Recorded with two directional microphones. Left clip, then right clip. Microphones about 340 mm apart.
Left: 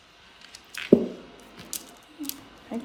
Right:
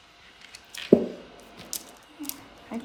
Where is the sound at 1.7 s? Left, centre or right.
Centre.